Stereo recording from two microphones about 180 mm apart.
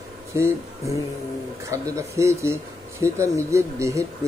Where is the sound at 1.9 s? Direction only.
15° right (ahead or behind).